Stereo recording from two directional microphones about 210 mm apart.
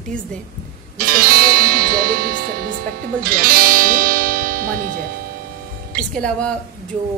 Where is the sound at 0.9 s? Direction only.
45° right (ahead or behind).